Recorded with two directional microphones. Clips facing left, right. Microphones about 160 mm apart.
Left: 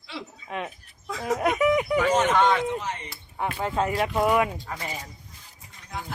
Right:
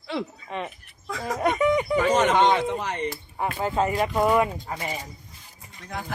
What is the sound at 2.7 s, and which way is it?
Speech, 65° right (ahead or behind).